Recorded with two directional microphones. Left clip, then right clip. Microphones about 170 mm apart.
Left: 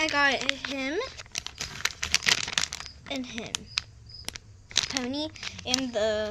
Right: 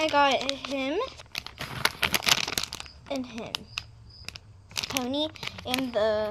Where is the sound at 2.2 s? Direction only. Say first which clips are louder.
Even; 10° right (ahead or behind).